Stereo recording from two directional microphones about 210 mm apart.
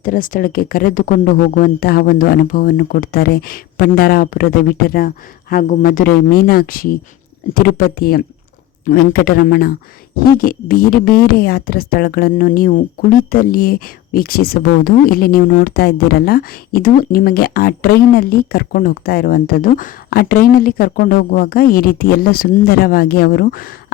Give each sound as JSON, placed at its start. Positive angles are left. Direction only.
{"t": 0.0, "sound": "speech", "side_deg": 40}